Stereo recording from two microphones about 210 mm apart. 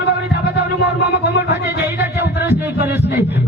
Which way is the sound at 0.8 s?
50° left (ahead or behind).